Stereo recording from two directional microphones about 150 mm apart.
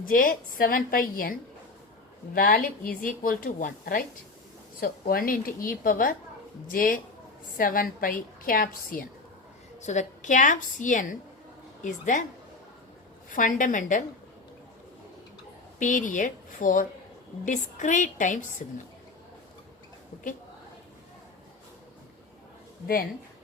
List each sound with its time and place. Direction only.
0.0 s a woman's voice: 65° left (ahead or behind)
2.3 s a woman's voice: 75° left (ahead or behind)
9.8 s a woman's voice: 50° left (ahead or behind)
13.3 s a woman's voice: 60° left (ahead or behind)
15.8 s a woman's voice: 60° left (ahead or behind)